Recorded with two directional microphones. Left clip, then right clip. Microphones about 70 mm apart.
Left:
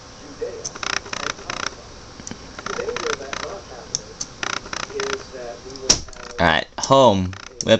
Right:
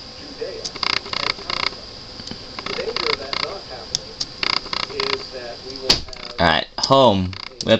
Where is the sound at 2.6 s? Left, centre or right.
Right.